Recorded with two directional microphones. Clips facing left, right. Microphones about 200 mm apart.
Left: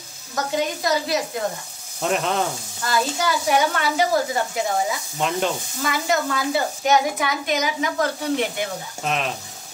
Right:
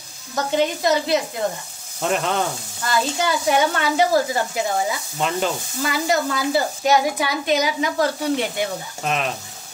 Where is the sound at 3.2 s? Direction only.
30° right (ahead or behind).